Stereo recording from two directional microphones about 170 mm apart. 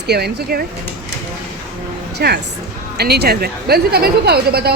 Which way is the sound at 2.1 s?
75° right (ahead or behind).